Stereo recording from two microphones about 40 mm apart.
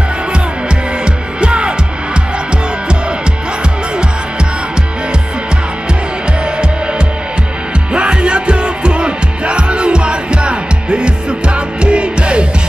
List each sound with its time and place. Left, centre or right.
1.4 s music: right
7.9 s music: right